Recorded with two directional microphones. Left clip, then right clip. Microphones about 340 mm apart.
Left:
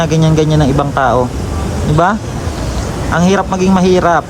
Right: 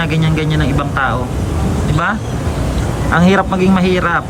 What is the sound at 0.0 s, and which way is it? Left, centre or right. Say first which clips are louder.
Speech: left 5 dB; centre.